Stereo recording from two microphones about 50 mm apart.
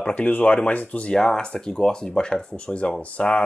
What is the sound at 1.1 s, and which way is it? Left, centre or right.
Speech, centre.